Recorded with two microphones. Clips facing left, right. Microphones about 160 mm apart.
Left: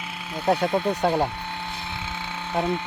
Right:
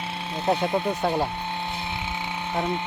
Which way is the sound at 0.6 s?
15° right (ahead or behind).